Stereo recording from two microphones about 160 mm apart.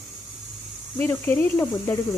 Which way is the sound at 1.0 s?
10° left (ahead or behind).